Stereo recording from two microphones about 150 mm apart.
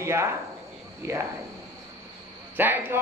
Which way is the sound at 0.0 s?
20° right (ahead or behind).